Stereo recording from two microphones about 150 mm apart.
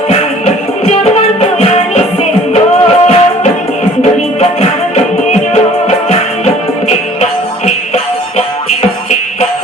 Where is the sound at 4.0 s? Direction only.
45° left (ahead or behind).